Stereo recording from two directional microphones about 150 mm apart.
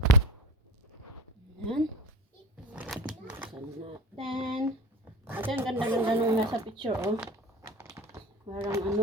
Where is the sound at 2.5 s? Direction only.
10° right (ahead or behind).